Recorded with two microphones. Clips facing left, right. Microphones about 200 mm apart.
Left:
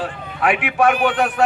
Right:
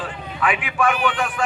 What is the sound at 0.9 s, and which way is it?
Speech, 45° left (ahead or behind).